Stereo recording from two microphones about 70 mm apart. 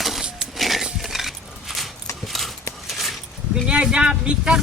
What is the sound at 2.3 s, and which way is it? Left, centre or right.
Clip-clop, centre.